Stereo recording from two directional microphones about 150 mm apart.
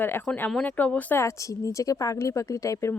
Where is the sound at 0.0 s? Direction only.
15° left (ahead or behind).